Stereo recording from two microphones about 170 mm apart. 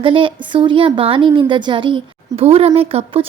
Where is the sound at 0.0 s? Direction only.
30° right (ahead or behind).